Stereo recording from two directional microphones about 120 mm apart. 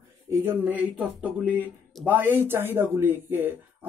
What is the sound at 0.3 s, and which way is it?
Speech, 15° right (ahead or behind).